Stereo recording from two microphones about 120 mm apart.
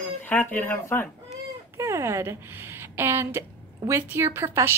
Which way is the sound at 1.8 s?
25° right (ahead or behind).